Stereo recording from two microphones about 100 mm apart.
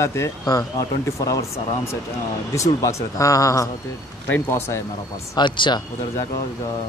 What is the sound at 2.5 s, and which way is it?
Speech, 30° left (ahead or behind).